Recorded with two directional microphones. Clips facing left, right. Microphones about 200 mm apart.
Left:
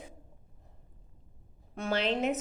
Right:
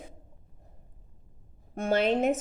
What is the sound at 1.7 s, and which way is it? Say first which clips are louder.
Speech: right 5 dB; 50° right (ahead or behind).